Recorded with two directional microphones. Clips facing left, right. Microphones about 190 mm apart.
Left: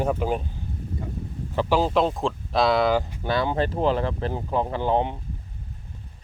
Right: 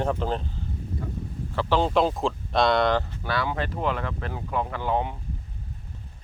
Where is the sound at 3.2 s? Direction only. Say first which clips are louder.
Left 7 dB; 25° left (ahead or behind).